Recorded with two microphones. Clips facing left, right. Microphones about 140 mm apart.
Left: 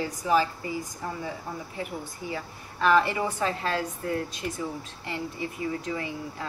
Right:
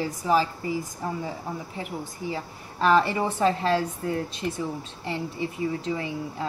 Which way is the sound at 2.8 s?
30° right (ahead or behind).